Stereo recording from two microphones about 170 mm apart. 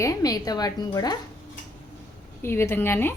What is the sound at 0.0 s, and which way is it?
A woman's voice, 20° left (ahead or behind).